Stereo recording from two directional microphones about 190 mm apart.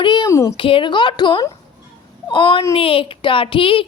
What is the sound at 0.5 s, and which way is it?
A woman's voice, 25° left (ahead or behind).